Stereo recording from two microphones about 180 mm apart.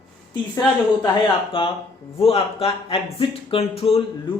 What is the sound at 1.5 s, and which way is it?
Speech, 30° left (ahead or behind).